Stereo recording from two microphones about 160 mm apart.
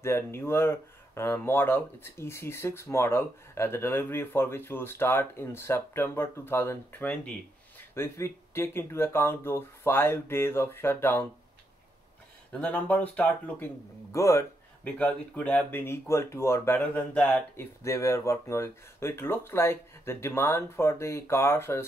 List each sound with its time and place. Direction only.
0.0 s speech: 15° left (ahead or behind)
12.5 s speech: 10° left (ahead or behind)